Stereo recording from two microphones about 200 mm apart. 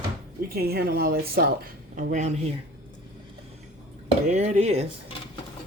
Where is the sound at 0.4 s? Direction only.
50° right (ahead or behind).